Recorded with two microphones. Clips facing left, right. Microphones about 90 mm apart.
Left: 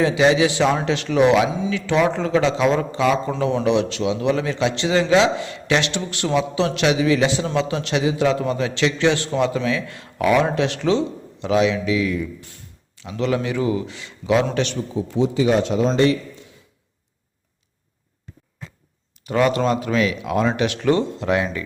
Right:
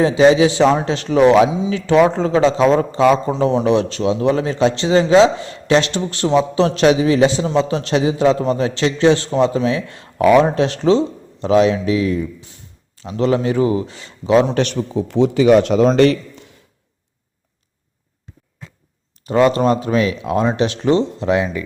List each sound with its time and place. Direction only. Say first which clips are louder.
0.0 s a man's voice: right 5 dB; 35° right (ahead or behind)
1.5 s speech: right 3 dB; 20° right (ahead or behind)
1.7 s a man's voice: right 5 dB; 35° right (ahead or behind)
14.5 s a man's voice: right 4 dB; 55° right (ahead or behind)
19.2 s speech: right 5 dB; 30° right (ahead or behind)